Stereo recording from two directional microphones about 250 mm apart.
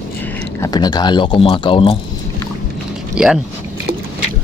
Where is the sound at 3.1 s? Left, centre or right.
Centre.